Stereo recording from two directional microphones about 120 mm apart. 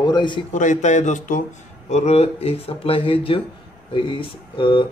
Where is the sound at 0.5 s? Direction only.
85° left.